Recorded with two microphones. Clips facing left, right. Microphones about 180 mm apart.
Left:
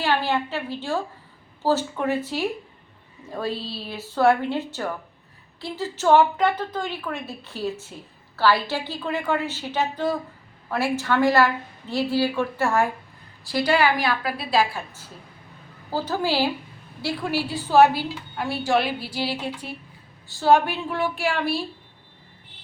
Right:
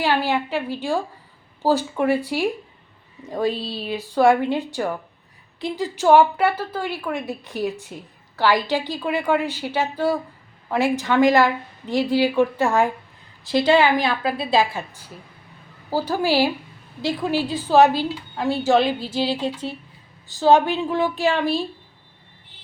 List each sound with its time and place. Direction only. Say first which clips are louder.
0.0 s a woman's voice: right 2 dB; 15° right (ahead or behind)
15.9 s a woman's voice: right 4 dB; 10° right (ahead or behind)